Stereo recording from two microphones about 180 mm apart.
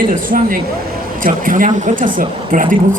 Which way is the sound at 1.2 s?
50° right (ahead or behind).